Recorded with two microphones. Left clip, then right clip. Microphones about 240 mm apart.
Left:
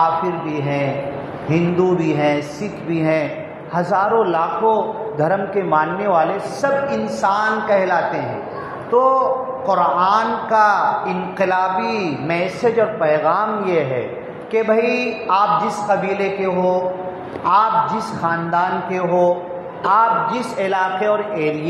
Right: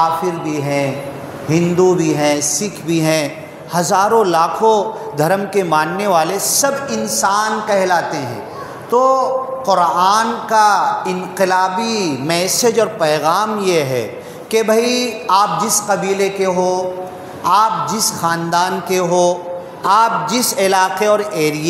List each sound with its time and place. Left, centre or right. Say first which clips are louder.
0.0 s a man's voice: right 2 dB; right